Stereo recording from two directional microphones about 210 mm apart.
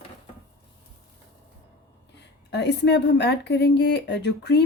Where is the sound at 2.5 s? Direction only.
55° left (ahead or behind).